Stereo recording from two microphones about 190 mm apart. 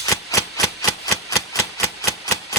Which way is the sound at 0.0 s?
15° left (ahead or behind).